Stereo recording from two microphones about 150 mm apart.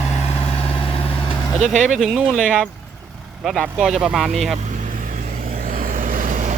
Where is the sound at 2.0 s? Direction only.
Centre (ahead or behind).